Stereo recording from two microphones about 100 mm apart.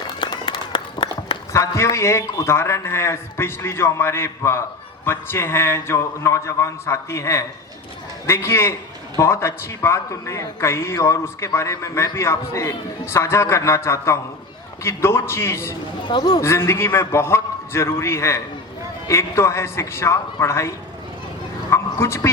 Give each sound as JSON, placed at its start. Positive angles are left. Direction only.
{"t": 0.2, "sound": "run", "side_deg": 45}
{"t": 1.5, "sound": "a man's voice", "side_deg": 30}
{"t": 16.0, "sound": "a man's voice", "side_deg": 45}
{"t": 16.4, "sound": "a man's voice", "side_deg": 25}
{"t": 21.7, "sound": "a sound", "side_deg": 25}